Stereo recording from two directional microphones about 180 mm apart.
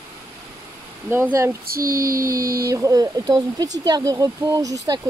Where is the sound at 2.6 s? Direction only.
20° right (ahead or behind).